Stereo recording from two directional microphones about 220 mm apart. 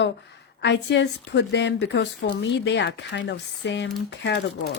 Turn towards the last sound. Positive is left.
turn(degrees=50)  # may be behind; listen again after turning